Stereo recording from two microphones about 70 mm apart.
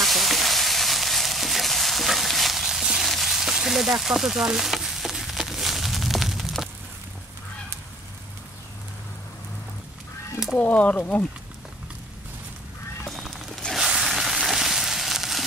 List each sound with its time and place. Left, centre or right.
0.0 s frying: centre
10.6 s speech: centre
13.7 s a sound: centre